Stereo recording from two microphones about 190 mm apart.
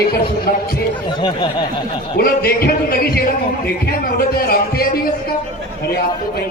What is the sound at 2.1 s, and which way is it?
Speech, 50° left (ahead or behind).